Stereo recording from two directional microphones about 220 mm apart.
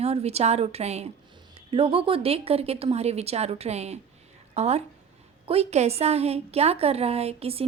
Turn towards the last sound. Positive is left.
turn(degrees=-25)  # may be behind; listen again after turning